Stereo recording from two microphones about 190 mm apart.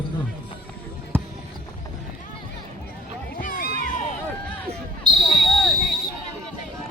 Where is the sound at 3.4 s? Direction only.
50° left (ahead or behind).